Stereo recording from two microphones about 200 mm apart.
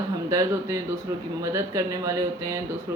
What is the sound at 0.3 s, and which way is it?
Speech, 15° right (ahead or behind).